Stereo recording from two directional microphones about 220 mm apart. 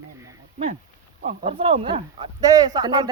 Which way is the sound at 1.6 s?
25° right (ahead or behind).